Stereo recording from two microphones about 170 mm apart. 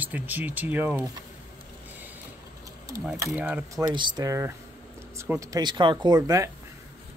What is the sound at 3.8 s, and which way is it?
Speech, 25° right (ahead or behind).